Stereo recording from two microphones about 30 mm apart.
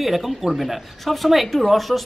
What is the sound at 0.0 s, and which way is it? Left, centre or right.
A woman's voice, centre.